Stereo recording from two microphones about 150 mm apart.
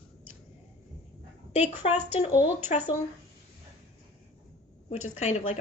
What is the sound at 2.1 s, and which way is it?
Speech, 50° left (ahead or behind).